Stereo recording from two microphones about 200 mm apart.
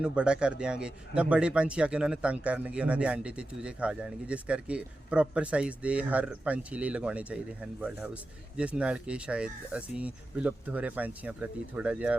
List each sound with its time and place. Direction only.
0.0 s a man's voice: 5° right (ahead or behind)